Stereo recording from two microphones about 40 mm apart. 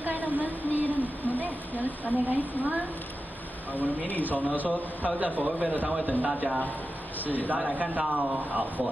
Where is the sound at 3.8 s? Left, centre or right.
Left.